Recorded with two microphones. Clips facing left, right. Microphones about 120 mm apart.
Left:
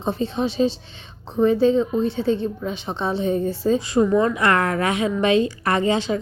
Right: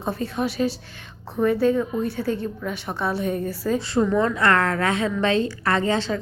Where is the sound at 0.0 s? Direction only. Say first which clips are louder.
Left 2 dB; 25° left (ahead or behind).